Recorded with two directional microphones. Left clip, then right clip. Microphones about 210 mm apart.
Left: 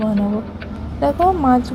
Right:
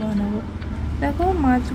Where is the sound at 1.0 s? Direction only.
15° left (ahead or behind).